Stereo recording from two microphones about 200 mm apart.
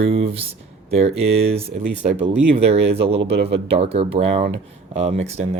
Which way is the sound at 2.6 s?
30° right (ahead or behind).